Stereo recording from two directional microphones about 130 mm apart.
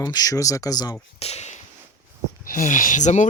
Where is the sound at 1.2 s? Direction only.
55° left (ahead or behind).